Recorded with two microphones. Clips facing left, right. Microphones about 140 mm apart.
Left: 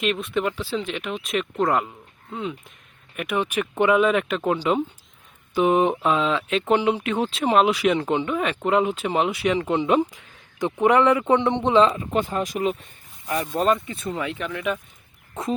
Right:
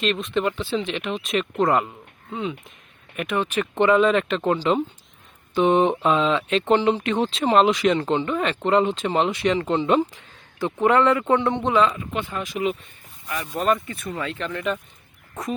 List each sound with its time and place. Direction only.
0.0 s speech: 5° left (ahead or behind)
3.2 s speech: 10° left (ahead or behind); by 13.5 s 35° left (ahead or behind)
13.8 s speech: 25° left (ahead or behind)
14.2 s speech: 10° left (ahead or behind)